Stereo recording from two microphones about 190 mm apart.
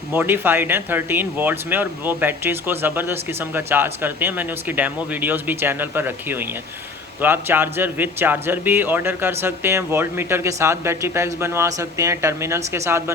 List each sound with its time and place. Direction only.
0.1 s speech: 10° right (ahead or behind)